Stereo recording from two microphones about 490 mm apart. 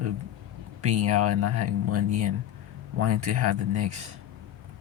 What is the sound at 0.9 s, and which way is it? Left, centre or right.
Speech, right.